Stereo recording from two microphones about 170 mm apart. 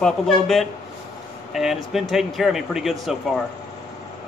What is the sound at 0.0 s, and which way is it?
Speech, centre (ahead or behind).